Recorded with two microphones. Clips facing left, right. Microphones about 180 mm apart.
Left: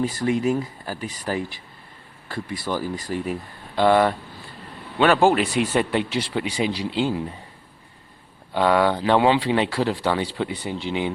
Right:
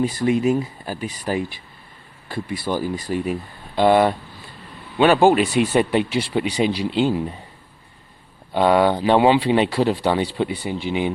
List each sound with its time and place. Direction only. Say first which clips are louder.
0.0 s speech: right 3 dB; 15° right (ahead or behind)
8.5 s speech: right 3 dB; 20° right (ahead or behind)